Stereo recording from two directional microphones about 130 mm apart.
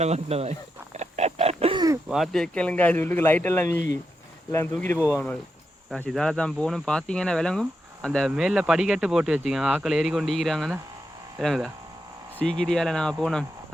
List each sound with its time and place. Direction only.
0.0 s speech: 55° right (ahead or behind)
0.9 s pig: 55° right (ahead or behind)
1.7 s a sound: 30° right (ahead or behind)
2.0 s speech: centre (ahead or behind); by 4.9 s 15° left (ahead or behind)
6.1 s speech: 5° left (ahead or behind)